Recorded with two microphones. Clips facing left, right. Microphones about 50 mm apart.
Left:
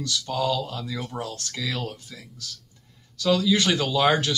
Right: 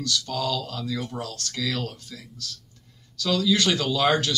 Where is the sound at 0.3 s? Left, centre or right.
Centre.